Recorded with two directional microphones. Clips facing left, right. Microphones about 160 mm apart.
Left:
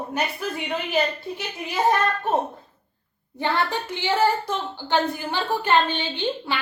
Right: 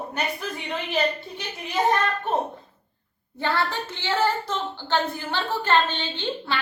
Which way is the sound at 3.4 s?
15° left (ahead or behind).